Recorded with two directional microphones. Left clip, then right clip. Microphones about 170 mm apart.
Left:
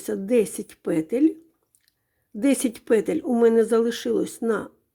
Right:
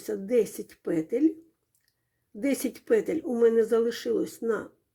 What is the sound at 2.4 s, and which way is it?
Speech, 30° left (ahead or behind).